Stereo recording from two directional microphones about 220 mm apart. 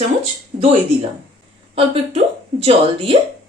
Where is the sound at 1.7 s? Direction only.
25° right (ahead or behind).